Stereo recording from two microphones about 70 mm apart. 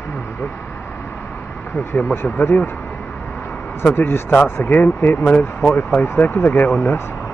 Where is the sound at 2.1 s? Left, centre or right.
Left.